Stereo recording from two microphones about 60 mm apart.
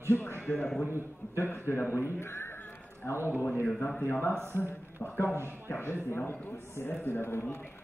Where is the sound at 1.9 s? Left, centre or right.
Left.